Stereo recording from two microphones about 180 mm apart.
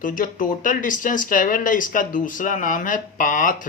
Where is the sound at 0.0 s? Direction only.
50° left (ahead or behind).